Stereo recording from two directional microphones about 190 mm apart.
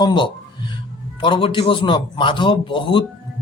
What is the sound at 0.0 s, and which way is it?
Speech, 25° left (ahead or behind).